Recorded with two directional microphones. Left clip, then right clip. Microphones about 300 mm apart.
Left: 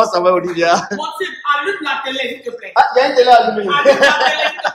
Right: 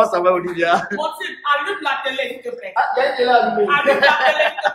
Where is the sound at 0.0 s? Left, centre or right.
Centre.